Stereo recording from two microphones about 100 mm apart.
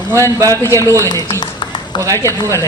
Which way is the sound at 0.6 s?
30° left (ahead or behind).